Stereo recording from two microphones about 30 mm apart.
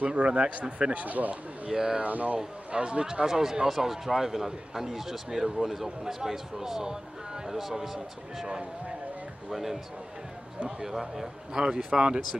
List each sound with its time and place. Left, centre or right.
0.0 s a man's voice: right
0.9 s speech: right
1.7 s speech: right
2.0 s speech: right
2.7 s speech: right
3.3 s a man's voice: centre
9.5 s a man's voice: centre
10.8 s a man's voice: centre
11.6 s speech: right